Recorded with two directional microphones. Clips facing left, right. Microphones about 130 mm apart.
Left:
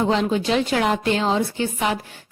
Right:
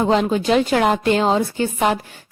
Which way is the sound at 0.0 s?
45° right (ahead or behind).